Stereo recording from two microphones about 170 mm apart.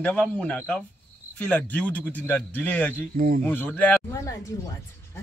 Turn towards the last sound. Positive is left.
turn(degrees=15)  # may be behind; listen again after turning